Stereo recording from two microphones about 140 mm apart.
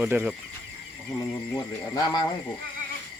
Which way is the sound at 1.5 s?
25° left (ahead or behind).